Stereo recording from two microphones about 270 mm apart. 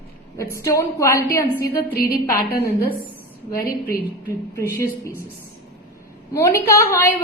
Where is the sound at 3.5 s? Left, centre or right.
Left.